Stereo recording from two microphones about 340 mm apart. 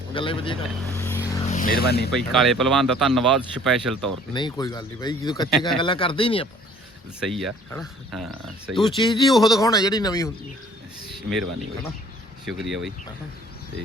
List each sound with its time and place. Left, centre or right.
0.1 s speech: centre
0.9 s vehicle: centre
1.5 s speech: left
2.3 s speech: centre
4.4 s speech: centre
7.3 s speech: centre
9.0 s speech: centre
9.3 s speech: centre
9.6 s speech: centre
11.3 s speech: centre